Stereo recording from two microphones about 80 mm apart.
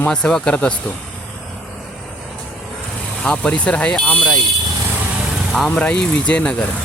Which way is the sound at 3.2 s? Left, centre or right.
Centre.